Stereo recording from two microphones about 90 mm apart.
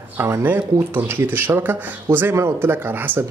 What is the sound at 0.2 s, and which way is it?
Speech, 25° right (ahead or behind).